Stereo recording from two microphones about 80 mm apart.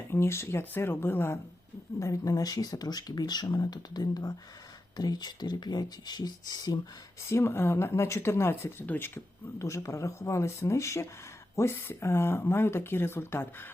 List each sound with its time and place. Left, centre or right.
0.1 s speech: left
2.0 s speech: left
7.3 s speech: left